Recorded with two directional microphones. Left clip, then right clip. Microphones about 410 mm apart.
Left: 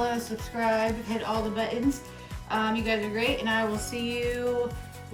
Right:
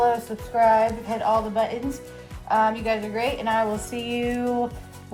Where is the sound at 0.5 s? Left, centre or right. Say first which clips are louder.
Right 8 dB; centre.